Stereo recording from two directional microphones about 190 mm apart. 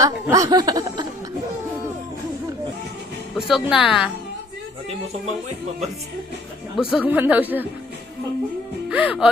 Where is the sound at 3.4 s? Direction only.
Centre (ahead or behind).